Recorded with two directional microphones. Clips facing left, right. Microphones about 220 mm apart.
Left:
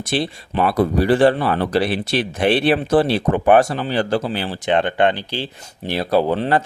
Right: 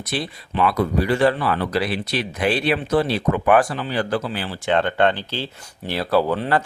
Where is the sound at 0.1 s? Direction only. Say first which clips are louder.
Left 4 dB; 30° left (ahead or behind).